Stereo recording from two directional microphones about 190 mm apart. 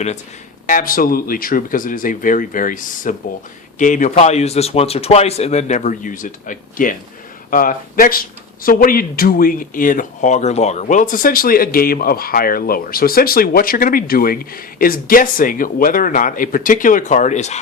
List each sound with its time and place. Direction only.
0.7 s speech: 45° left (ahead or behind)